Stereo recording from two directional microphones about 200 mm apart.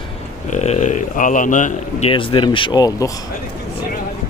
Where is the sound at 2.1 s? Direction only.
25° left (ahead or behind).